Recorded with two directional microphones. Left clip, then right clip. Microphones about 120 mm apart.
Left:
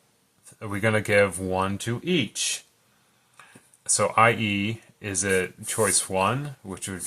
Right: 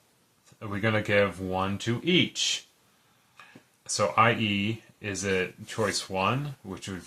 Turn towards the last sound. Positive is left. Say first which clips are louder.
# left 3 dB
turn(degrees=25)  # may be behind; listen again after turning